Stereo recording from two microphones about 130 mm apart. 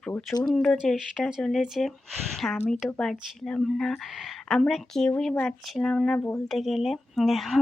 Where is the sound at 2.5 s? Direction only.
10° left (ahead or behind).